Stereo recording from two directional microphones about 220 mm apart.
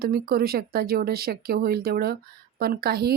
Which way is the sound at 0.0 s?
45° right (ahead or behind).